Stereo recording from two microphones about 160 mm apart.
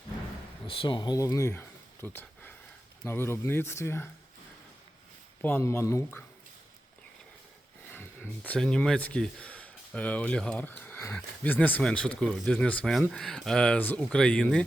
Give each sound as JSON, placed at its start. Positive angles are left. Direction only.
{"t": 0.7, "sound": "speech", "side_deg": 35}
{"t": 5.4, "sound": "speech", "side_deg": 15}
{"t": 7.9, "sound": "speech", "side_deg": 10}